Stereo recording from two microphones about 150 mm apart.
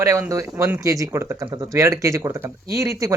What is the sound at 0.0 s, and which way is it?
A man's voice, 20° right (ahead or behind).